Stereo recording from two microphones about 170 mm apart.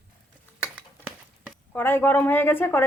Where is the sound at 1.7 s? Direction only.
10° left (ahead or behind).